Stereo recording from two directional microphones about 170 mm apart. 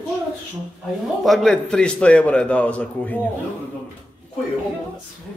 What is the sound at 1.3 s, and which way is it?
A man's voice, 5° left (ahead or behind).